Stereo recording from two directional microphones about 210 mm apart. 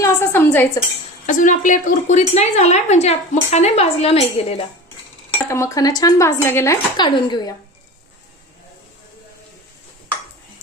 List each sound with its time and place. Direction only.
0.0 s a woman's voice: 10° left (ahead or behind)
1.3 s a woman's voice: 35° left (ahead or behind)
5.3 s speech: 15° left (ahead or behind)